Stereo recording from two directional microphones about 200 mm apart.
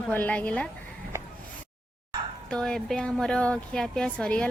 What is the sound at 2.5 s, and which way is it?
A woman's voice, 5° left (ahead or behind).